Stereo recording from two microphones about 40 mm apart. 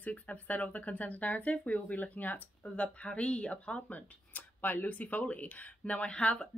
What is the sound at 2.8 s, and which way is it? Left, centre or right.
Speech, left.